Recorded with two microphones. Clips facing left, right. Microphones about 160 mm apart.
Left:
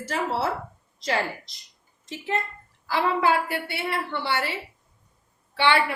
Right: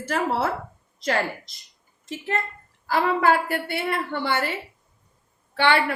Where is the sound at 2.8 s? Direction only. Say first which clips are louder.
Right 2 dB; 50° right (ahead or behind).